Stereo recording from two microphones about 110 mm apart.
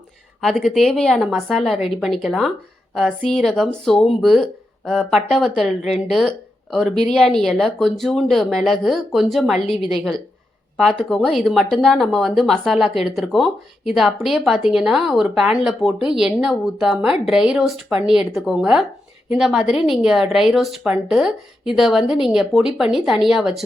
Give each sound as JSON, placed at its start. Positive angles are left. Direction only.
{"t": 0.4, "sound": "a woman's voice", "side_deg": 0}